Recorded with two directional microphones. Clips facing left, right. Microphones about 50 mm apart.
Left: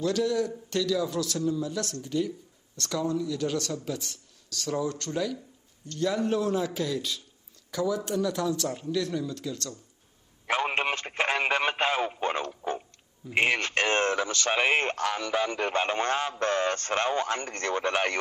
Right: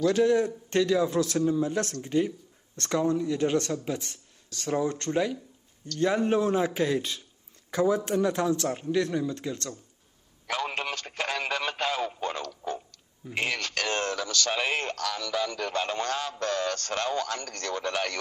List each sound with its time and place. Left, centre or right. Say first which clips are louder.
0.0 s a man's voice: right 4 dB; right
10.4 s speech: left 4 dB; left